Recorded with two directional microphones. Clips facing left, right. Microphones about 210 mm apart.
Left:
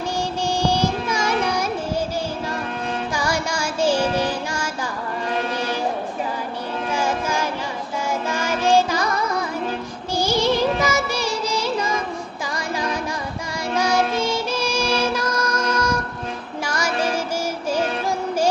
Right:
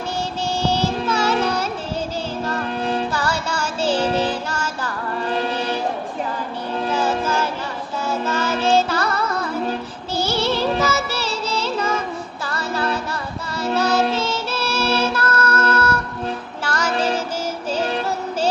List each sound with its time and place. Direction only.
0.6 s music: 15° left (ahead or behind)
3.1 s music: 10° left (ahead or behind)
6.9 s music: 10° left (ahead or behind)
13.6 s child singing: 15° left (ahead or behind)
16.6 s music: 10° left (ahead or behind)